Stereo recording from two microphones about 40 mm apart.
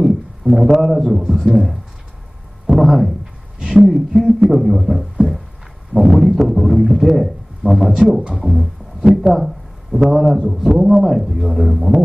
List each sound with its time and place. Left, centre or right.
0.5 s a man's voice: centre
2.6 s a sound: centre
3.6 s a man's voice: centre